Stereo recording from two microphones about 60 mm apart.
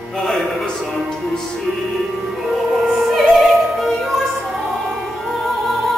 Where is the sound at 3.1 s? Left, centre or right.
Centre.